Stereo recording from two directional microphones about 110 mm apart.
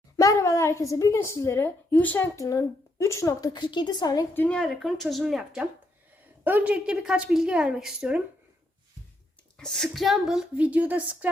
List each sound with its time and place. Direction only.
0.2 s a woman's voice: 30° left (ahead or behind)
4.4 s a woman's voice: 10° left (ahead or behind); by 8.2 s 5° right (ahead or behind)
9.6 s a woman's voice: 5° left (ahead or behind); by 11.3 s 15° right (ahead or behind)